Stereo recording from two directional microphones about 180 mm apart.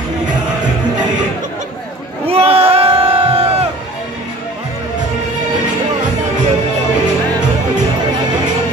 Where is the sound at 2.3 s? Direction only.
35° right (ahead or behind).